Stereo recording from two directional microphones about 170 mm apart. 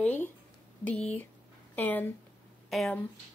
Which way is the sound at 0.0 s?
10° left (ahead or behind).